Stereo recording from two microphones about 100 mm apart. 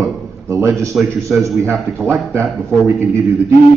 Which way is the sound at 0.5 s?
30° right (ahead or behind).